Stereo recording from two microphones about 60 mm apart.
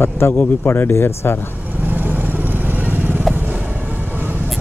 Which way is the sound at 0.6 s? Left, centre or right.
Left.